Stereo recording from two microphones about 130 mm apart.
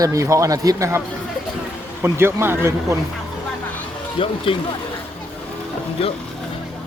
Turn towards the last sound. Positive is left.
turn(degrees=45)  # may be behind; listen again after turning